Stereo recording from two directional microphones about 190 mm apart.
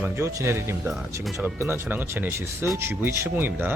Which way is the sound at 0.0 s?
15° right (ahead or behind).